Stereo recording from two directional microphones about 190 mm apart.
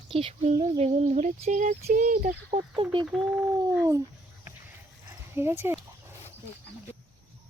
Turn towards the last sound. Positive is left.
turn(degrees=-10)  # may be behind; listen again after turning